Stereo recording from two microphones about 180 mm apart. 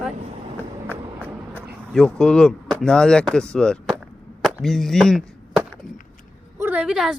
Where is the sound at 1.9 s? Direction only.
5° left (ahead or behind).